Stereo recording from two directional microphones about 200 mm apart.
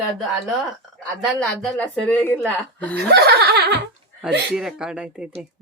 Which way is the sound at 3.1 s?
55° right (ahead or behind).